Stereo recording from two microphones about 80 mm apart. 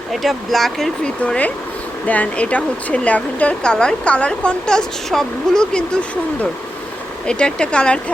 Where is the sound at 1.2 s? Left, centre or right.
Centre.